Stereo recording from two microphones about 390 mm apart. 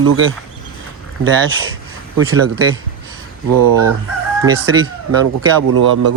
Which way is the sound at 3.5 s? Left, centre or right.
Right.